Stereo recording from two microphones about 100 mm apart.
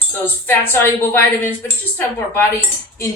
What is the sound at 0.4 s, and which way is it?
A woman's voice, 25° left (ahead or behind).